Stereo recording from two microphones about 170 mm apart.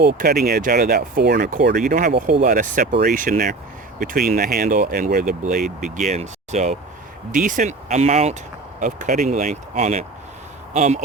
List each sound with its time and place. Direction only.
0.2 s speech: 65° right (ahead or behind); by 6.7 s 40° right (ahead or behind)
7.3 s speech: 50° right (ahead or behind)